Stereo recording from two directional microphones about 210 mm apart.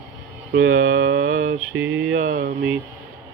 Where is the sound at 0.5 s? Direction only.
70° right (ahead or behind).